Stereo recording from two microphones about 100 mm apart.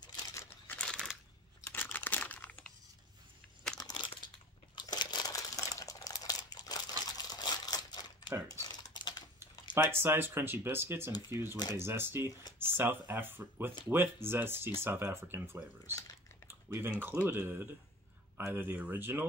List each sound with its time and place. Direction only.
0.3 s crumpling: 25° left (ahead or behind)
0.7 s a sound: 10° left (ahead or behind)
1.7 s crumpling: 20° left (ahead or behind)
3.7 s crumpling: 45° left (ahead or behind)
8.5 s typing: 40° left (ahead or behind)
9.8 s speech: 25° right (ahead or behind)
16.4 s typing: 25° right (ahead or behind)
17.2 s speech: 20° right (ahead or behind)